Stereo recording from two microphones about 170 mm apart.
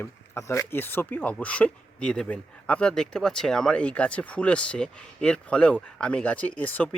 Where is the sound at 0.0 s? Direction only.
15° left (ahead or behind).